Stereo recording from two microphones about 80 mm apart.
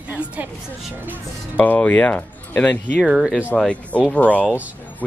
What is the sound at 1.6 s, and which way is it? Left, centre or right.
Speech, left.